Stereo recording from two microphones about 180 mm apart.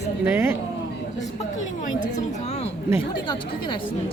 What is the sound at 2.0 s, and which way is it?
A woman's voice, 35° left (ahead or behind).